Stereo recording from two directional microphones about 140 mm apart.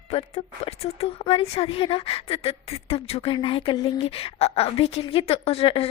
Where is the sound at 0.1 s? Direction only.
45° left (ahead or behind).